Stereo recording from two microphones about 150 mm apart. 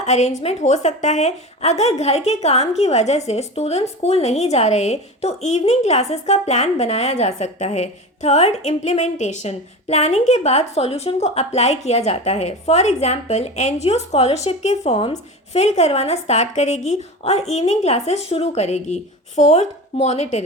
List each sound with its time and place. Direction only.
0.0 s a woman's voice: 50° left (ahead or behind)